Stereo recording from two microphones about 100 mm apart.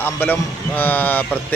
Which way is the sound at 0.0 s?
20° left (ahead or behind).